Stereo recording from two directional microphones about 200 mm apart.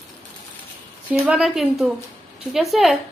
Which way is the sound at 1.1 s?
5° right (ahead or behind).